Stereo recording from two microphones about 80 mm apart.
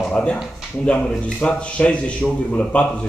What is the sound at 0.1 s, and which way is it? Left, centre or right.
A man's voice, centre.